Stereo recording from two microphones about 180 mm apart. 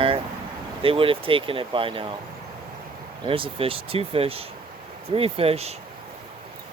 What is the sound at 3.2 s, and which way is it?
Speech, 30° right (ahead or behind).